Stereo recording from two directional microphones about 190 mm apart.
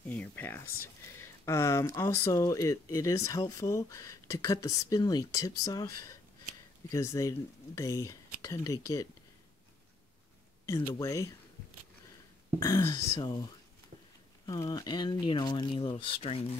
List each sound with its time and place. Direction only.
0.1 s a sound: 10° left (ahead or behind)
1.1 s speech: 15° left (ahead or behind)
6.9 s speech: 15° left (ahead or behind)
10.6 s speech: 15° left (ahead or behind)
12.5 s speech: 15° left (ahead or behind)
14.4 s speech: 20° left (ahead or behind)